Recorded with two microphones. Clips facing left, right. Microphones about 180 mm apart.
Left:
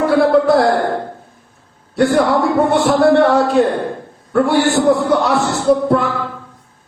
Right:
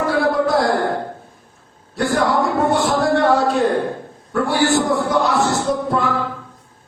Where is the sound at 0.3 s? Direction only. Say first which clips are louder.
Left 5 dB; 65° left (ahead or behind).